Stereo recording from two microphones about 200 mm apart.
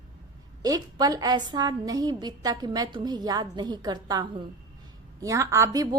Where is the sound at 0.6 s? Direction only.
20° right (ahead or behind).